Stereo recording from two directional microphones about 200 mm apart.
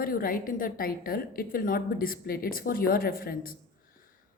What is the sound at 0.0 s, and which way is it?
A woman's voice, 45° left (ahead or behind).